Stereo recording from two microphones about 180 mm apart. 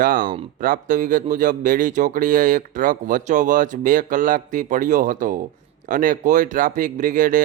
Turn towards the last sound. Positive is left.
turn(degrees=-45)  # may be behind; listen again after turning